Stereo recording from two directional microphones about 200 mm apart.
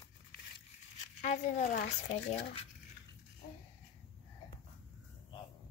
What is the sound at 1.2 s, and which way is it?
Speech, 35° left (ahead or behind).